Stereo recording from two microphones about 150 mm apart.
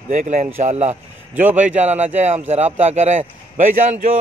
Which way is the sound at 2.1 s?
50° right (ahead or behind).